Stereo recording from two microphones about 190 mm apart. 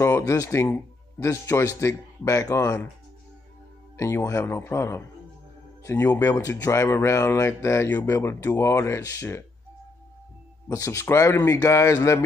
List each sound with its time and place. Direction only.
0.0 s a man's voice: 15° left (ahead or behind)
3.9 s a man's voice: 15° left (ahead or behind)
10.7 s a man's voice: 15° left (ahead or behind)